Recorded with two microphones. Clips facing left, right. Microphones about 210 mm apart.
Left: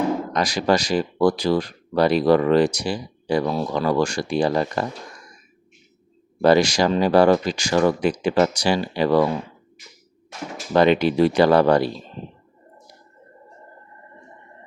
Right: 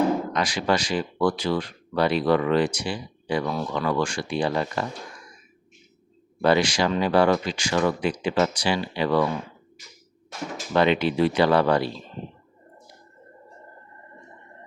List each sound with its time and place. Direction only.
0.3 s speech: 40° left (ahead or behind)
6.4 s speech: 40° left (ahead or behind)
10.8 s speech: 40° left (ahead or behind)